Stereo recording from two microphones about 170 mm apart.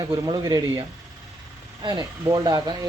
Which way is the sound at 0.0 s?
25° right (ahead or behind).